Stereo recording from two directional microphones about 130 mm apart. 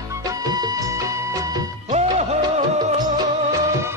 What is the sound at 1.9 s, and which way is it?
Music, 60° right (ahead or behind).